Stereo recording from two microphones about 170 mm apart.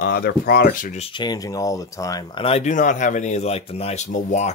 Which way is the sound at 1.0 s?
30° left (ahead or behind).